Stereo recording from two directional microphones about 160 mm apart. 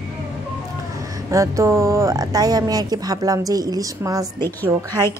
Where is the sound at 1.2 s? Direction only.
20° right (ahead or behind).